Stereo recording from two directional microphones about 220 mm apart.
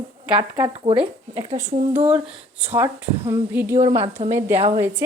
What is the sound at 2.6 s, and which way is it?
Speech, 10° right (ahead or behind).